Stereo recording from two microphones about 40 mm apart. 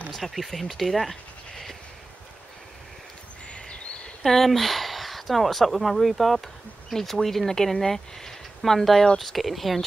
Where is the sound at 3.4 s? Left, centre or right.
Left.